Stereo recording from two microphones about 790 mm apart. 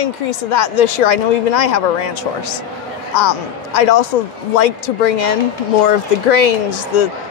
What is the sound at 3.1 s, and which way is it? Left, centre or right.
Speech, left.